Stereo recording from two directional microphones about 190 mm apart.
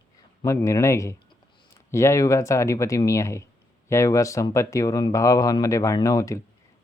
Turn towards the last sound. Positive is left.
turn(degrees=15)  # may be behind; listen again after turning